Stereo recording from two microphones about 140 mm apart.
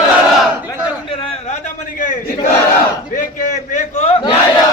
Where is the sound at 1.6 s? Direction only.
70° left (ahead or behind); by 4.2 s 50° left (ahead or behind).